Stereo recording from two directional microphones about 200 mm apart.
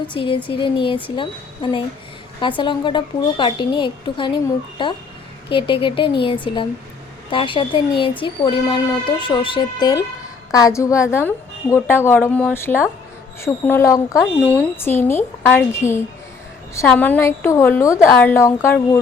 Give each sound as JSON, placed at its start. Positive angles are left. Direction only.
{"t": 0.1, "sound": "a woman's voice", "side_deg": 25}